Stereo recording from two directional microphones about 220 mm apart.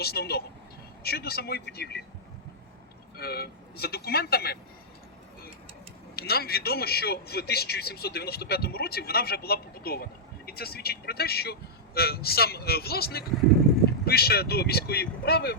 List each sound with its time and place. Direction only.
0.0 s a man's voice: 45° left (ahead or behind)
3.2 s a man's voice: 45° left (ahead or behind)
6.1 s a man's voice: 45° left (ahead or behind)